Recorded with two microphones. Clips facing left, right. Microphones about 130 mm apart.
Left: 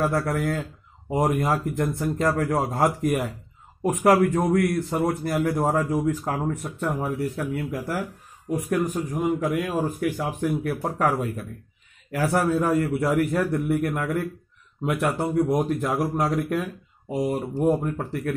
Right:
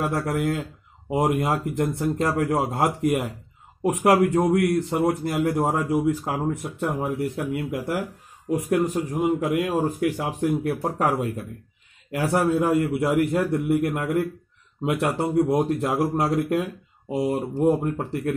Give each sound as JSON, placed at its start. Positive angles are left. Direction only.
{"t": 0.0, "sound": "a man's voice", "side_deg": -20}